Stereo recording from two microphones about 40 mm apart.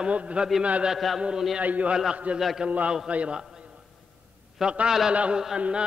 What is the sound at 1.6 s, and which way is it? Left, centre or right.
A man's voice, right.